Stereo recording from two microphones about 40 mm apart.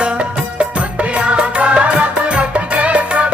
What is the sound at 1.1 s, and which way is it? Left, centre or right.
Music, right.